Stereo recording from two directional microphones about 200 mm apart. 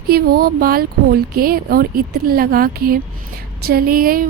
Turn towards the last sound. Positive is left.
turn(degrees=-45)  # may be behind; listen again after turning